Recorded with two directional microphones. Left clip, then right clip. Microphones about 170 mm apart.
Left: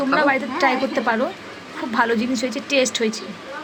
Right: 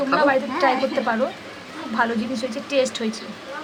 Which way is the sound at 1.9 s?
20° left (ahead or behind).